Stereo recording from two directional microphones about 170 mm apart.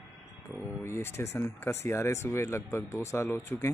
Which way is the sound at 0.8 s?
15° left (ahead or behind).